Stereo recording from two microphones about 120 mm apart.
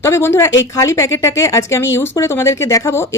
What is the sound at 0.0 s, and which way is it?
A woman's voice, 20° left (ahead or behind).